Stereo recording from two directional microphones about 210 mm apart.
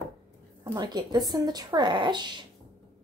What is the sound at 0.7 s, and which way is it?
Speech, 20° right (ahead or behind).